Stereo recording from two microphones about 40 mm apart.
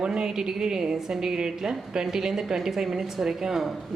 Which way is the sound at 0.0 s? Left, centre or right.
Centre.